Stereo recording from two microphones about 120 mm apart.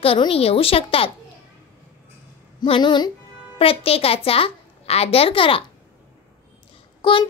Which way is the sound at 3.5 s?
50° left (ahead or behind).